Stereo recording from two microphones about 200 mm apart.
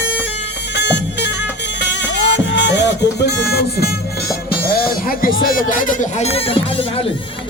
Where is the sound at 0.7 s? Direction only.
60° left (ahead or behind).